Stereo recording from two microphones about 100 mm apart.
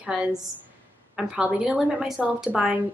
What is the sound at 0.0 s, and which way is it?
Speech, 5° right (ahead or behind).